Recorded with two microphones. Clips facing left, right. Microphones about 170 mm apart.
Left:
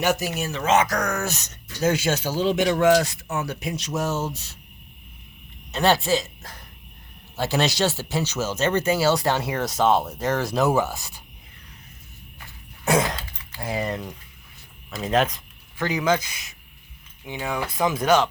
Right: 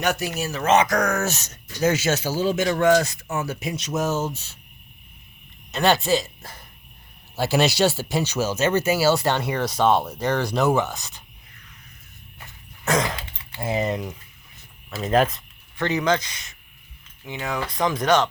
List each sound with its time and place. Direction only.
0.0 s speech: centre (ahead or behind)
1.0 s speech: 20° right (ahead or behind)
2.2 s speech: 5° right (ahead or behind)
5.7 s speech: 5° left (ahead or behind)
12.8 s throat clearing: 10° left (ahead or behind)
13.3 s mechanisms: 25° right (ahead or behind)
14.8 s speech: centre (ahead or behind)